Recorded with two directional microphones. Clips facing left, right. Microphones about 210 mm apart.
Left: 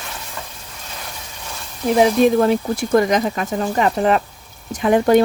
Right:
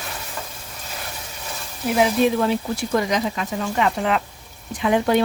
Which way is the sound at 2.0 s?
45° left (ahead or behind).